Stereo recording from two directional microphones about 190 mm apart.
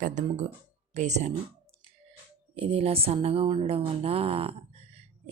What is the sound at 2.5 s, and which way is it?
Speech, 30° right (ahead or behind).